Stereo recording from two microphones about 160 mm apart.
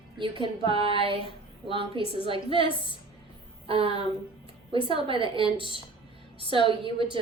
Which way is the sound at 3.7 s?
35° right (ahead or behind).